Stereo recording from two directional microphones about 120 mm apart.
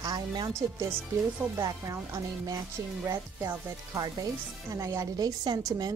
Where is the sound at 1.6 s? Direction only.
30° right (ahead or behind).